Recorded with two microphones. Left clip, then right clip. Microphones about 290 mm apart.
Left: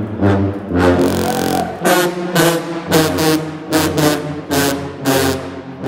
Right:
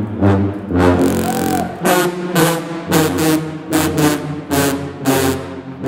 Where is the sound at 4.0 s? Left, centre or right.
Centre.